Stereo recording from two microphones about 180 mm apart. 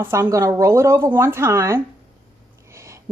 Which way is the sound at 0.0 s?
15° right (ahead or behind).